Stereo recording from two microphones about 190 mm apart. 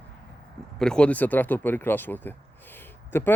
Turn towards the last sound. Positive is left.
turn(degrees=10)  # may be behind; listen again after turning